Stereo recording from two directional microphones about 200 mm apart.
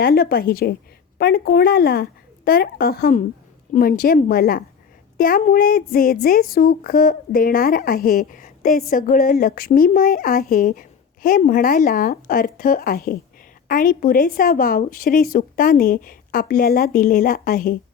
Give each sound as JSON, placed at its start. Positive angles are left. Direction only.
{"t": 0.0, "sound": "a woman's voice", "side_deg": 50}